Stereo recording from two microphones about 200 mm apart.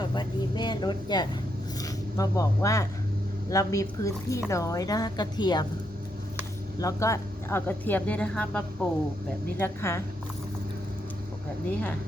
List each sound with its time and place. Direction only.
0.0 s a sound: 20° left (ahead or behind)
1.8 s a woman's voice: 15° left (ahead or behind)
6.7 s a woman's voice: 15° left (ahead or behind)